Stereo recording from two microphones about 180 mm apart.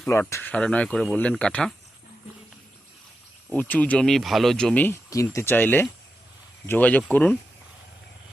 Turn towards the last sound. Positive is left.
turn(degrees=10)  # may be behind; listen again after turning